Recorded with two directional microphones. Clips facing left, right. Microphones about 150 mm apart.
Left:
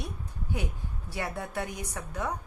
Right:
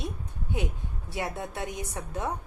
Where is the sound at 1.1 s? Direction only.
20° right (ahead or behind).